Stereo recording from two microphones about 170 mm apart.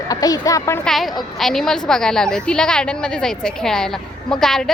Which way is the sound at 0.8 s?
Centre (ahead or behind).